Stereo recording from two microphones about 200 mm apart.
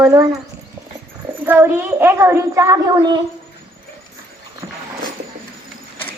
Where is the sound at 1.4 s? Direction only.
10° right (ahead or behind).